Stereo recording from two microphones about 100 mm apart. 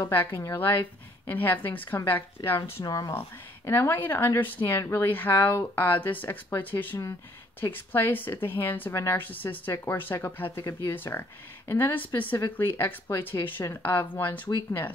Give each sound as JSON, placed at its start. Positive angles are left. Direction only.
{"t": 0.1, "sound": "speech", "side_deg": 20}
{"t": 2.8, "sound": "speech", "side_deg": 40}
{"t": 3.1, "sound": "speech", "side_deg": 25}